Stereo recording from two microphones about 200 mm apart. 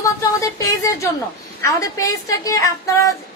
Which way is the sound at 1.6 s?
15° left (ahead or behind).